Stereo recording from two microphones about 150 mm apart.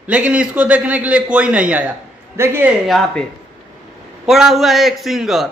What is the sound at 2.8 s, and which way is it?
Speech, centre (ahead or behind).